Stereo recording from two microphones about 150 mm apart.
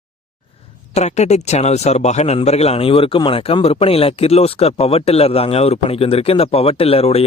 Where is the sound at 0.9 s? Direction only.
50° left (ahead or behind).